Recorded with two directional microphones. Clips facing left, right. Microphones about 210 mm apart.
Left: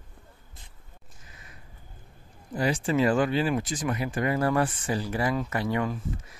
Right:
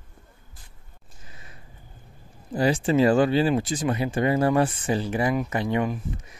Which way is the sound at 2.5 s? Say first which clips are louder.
Right 4 dB; 30° right (ahead or behind).